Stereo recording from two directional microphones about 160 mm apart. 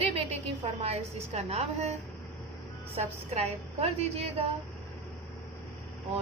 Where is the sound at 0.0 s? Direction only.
40° right (ahead or behind).